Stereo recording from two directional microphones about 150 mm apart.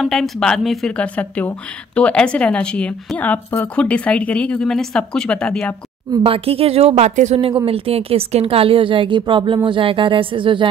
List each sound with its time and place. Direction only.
0.0 s a woman's voice: centre (ahead or behind)
6.2 s a woman's voice: 40° right (ahead or behind)